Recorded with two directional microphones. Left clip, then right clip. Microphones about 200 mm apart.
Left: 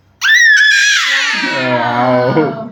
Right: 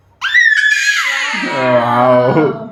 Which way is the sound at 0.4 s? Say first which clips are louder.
Left 3 dB; 15° right (ahead or behind).